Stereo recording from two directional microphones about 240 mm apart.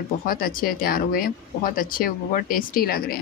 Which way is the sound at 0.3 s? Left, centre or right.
Left.